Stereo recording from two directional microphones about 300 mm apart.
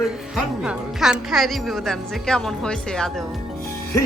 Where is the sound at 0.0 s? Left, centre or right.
Centre.